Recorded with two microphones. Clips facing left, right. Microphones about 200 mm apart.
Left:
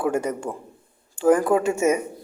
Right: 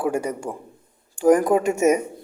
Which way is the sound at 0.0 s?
10° right (ahead or behind).